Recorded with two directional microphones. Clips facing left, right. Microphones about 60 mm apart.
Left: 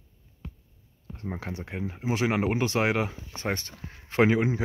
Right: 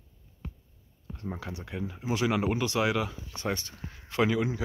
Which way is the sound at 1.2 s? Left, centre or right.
Left.